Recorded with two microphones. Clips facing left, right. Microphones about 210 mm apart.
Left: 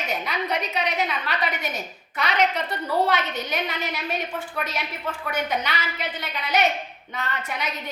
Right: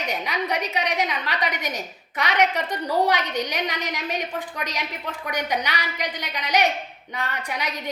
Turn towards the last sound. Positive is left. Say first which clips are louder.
# right 1 dB
turn(degrees=-15)  # may be behind; listen again after turning